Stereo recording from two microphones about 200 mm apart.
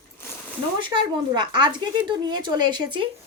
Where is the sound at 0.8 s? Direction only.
25° right (ahead or behind).